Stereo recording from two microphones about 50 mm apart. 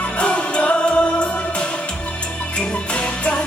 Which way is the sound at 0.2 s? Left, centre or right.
Left.